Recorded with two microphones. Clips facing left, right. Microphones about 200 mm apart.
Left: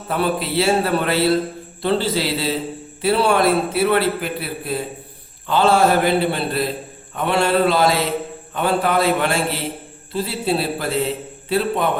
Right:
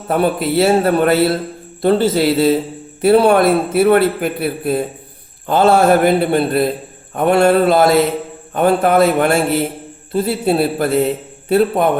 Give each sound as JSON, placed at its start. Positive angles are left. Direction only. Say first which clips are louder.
{"t": 0.1, "sound": "a man's voice", "louder": "right 5 dB", "side_deg": -50}